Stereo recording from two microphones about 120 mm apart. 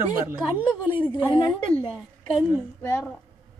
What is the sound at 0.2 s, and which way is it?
Speech, 15° right (ahead or behind).